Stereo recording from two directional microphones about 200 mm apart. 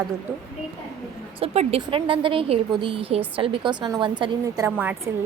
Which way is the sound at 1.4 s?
30° right (ahead or behind).